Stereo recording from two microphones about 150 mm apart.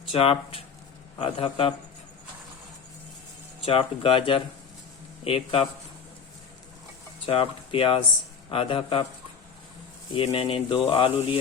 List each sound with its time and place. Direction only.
0.1 s speech: 40° left (ahead or behind)
3.7 s speech: 40° left (ahead or behind)
7.3 s speech: 40° left (ahead or behind)
10.2 s speech: 40° left (ahead or behind)